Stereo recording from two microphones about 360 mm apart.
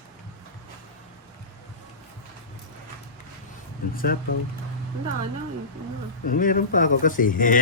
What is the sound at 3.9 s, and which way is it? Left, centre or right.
Speech, left.